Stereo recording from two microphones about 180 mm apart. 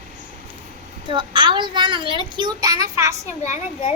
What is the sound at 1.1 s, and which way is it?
A child's voice, 25° right (ahead or behind).